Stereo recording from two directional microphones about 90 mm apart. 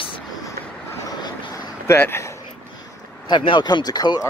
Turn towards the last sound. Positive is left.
turn(degrees=45)  # may be behind; listen again after turning